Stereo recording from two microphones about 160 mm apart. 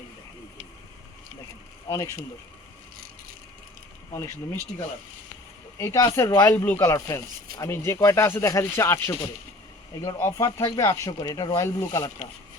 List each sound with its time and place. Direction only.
1.9 s speech: 20° left (ahead or behind)
5.7 s speech: 20° left (ahead or behind)
10.2 s speech: 15° left (ahead or behind)